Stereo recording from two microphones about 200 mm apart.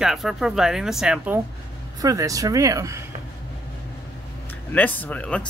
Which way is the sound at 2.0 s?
15° right (ahead or behind).